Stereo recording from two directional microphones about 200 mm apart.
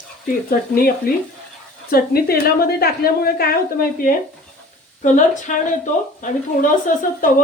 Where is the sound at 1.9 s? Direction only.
50° left (ahead or behind).